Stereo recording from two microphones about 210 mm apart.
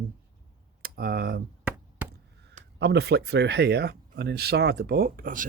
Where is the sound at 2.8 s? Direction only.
55° right (ahead or behind).